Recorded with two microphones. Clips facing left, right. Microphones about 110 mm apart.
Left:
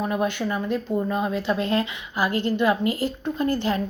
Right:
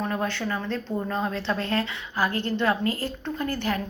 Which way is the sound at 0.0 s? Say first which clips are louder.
Left 3 dB; 15° left (ahead or behind).